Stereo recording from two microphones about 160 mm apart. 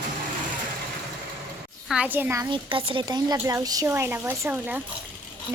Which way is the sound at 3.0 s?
25° right (ahead or behind).